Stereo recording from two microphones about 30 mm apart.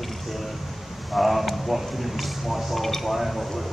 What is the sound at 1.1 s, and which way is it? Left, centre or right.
Speech, centre.